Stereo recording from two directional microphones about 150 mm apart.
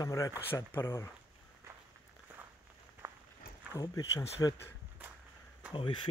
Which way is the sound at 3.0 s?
15° right (ahead or behind).